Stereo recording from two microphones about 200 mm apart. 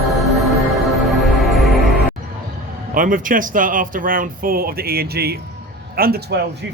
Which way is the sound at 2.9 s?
40° right (ahead or behind).